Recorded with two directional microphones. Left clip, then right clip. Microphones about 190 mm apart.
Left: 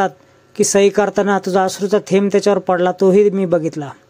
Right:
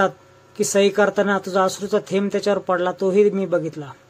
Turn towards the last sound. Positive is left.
turn(degrees=35)  # may be behind; listen again after turning